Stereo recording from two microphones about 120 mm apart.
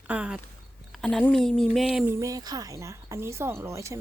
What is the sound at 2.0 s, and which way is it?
Speech, 20° right (ahead or behind).